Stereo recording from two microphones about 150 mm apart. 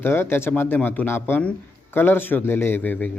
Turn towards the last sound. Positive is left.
turn(degrees=10)  # may be behind; listen again after turning